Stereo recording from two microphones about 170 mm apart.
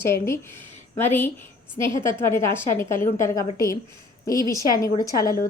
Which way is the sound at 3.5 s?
55° left (ahead or behind).